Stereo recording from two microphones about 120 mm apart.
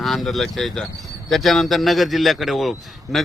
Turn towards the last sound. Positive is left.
turn(degrees=0)  # may be behind; listen again after turning